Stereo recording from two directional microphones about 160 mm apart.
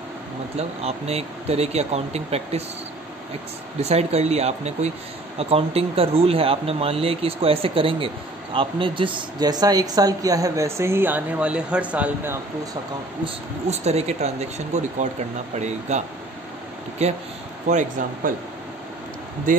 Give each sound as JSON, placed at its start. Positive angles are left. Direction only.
{"t": 0.6, "sound": "speech", "side_deg": -40}
{"t": 3.8, "sound": "speech", "side_deg": -40}
{"t": 13.2, "sound": "speech", "side_deg": -40}
{"t": 17.0, "sound": "speech", "side_deg": -45}